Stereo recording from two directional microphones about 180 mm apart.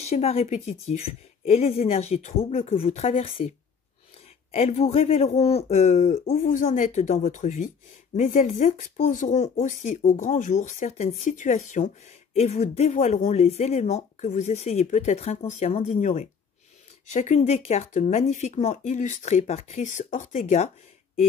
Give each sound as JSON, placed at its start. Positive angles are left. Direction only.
{"t": 0.0, "sound": "speech", "side_deg": 35}